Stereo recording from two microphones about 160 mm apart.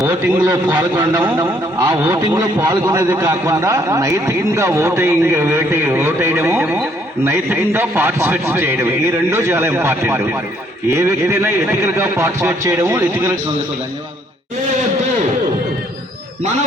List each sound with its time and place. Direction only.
0.0 s a man's voice: 20° right (ahead or behind)